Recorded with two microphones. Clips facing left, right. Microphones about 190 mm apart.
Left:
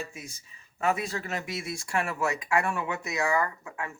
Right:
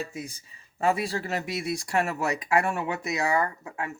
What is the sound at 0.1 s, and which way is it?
Speech, 35° right (ahead or behind).